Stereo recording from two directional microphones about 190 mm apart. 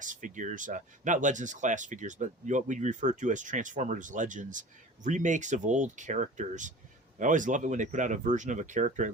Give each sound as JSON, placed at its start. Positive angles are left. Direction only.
{"t": 0.0, "sound": "speech", "side_deg": -40}